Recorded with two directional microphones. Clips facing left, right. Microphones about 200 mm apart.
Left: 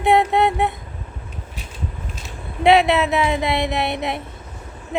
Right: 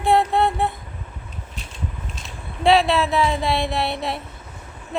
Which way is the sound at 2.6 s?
20° left (ahead or behind).